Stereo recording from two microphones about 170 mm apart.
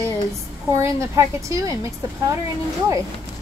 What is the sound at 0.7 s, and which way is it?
A woman's voice, 15° right (ahead or behind).